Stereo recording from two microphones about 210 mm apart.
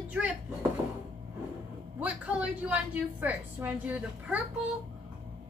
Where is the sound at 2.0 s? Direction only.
5° right (ahead or behind).